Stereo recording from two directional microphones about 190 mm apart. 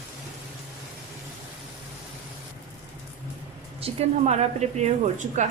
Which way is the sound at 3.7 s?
30° right (ahead or behind).